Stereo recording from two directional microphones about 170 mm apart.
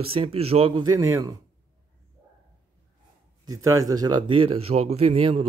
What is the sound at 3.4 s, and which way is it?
A man's voice, 20° right (ahead or behind).